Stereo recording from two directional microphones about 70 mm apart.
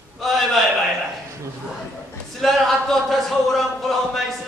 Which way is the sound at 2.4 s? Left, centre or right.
Centre.